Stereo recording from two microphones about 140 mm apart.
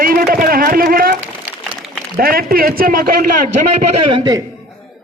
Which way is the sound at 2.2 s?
90° right.